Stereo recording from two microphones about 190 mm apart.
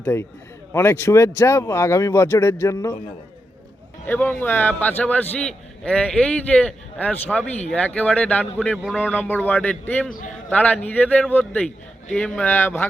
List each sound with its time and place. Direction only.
0.0 s a man's voice: 10° left (ahead or behind)
4.0 s a man's voice: 10° left (ahead or behind)